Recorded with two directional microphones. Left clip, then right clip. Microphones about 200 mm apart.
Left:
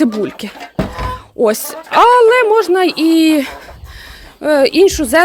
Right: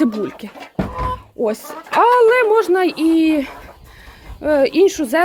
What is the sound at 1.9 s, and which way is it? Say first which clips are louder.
Speech: left 4 dB; 20° left (ahead or behind).